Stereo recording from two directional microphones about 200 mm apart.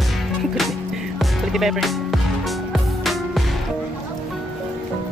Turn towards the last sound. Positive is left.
turn(degrees=0)  # may be behind; listen again after turning